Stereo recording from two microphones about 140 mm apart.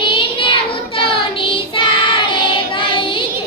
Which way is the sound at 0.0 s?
40° left (ahead or behind).